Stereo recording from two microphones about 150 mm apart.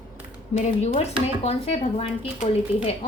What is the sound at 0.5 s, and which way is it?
A woman's voice, 50° left (ahead or behind).